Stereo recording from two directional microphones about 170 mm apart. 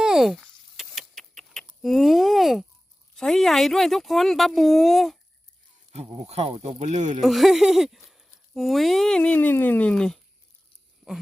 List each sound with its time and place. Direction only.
0.0 s a sound: 5° right (ahead or behind)
3.2 s speech: centre (ahead or behind)
5.9 s speech: 40° right (ahead or behind)
7.2 s speech: centre (ahead or behind)